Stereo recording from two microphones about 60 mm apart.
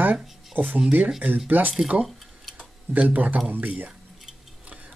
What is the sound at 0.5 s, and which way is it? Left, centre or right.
Speech, right.